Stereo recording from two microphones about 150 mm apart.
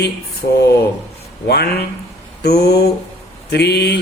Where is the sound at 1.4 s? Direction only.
90° left.